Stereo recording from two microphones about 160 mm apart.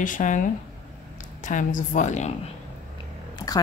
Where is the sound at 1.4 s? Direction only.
55° left (ahead or behind).